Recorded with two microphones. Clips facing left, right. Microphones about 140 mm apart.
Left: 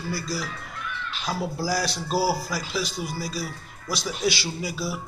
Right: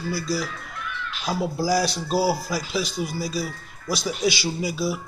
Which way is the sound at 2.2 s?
20° right (ahead or behind).